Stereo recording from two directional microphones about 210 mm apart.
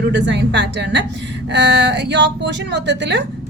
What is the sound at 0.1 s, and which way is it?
A woman's voice, 55° right (ahead or behind).